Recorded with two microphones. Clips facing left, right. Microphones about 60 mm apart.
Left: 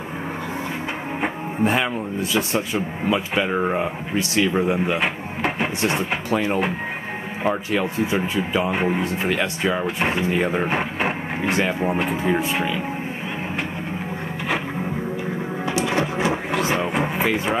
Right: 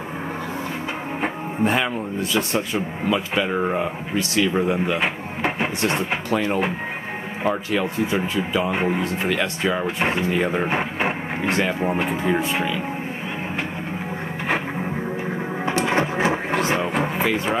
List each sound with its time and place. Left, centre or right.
1.2 s music: centre
2.3 s speech: centre
4.6 s speech: centre
5.0 s a sound: centre
5.8 s speech: centre
10.7 s speech: centre
11.4 s speech: centre
11.8 s speech: centre
15.8 s a sound: right
16.8 s music: centre